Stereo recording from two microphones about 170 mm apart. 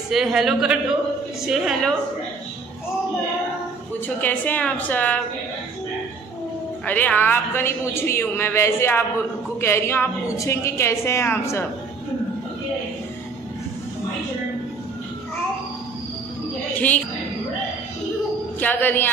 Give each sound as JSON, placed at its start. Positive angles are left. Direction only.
{"t": 0.1, "sound": "a man's voice", "side_deg": 0}
{"t": 4.2, "sound": "a man's voice", "side_deg": 10}
{"t": 6.9, "sound": "a man's voice", "side_deg": 10}
{"t": 18.6, "sound": "a man's voice", "side_deg": 10}